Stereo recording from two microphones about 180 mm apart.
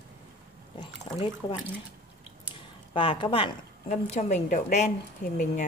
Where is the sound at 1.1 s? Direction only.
25° left (ahead or behind).